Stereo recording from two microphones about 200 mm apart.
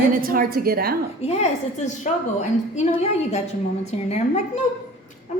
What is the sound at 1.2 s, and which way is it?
A woman's voice, 30° left (ahead or behind).